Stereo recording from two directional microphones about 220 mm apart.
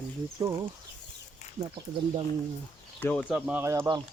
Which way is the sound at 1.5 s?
25° right (ahead or behind).